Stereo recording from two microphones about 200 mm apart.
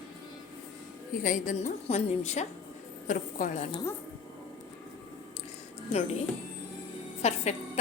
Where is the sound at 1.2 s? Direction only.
40° left (ahead or behind).